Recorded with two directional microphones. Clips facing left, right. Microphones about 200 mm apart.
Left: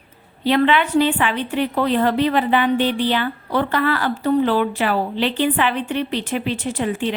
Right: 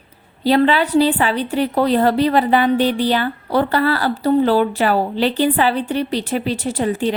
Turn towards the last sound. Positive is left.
turn(degrees=-40)  # may be behind; listen again after turning